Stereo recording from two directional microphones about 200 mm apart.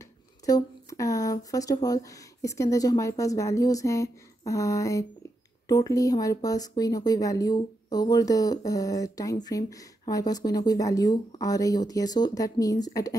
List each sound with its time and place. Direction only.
0.5 s speech: 15° left (ahead or behind)